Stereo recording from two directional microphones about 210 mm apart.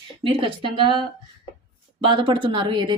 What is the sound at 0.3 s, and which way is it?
Speech, 25° right (ahead or behind).